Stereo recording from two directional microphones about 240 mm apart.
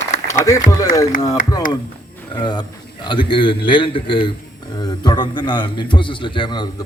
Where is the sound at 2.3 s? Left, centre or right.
Centre.